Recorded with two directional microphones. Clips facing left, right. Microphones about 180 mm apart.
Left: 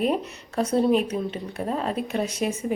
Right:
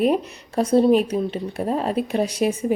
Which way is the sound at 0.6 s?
35° right (ahead or behind).